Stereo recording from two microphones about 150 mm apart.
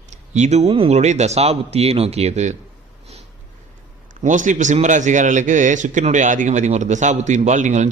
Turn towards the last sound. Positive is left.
turn(degrees=-50)  # may be behind; listen again after turning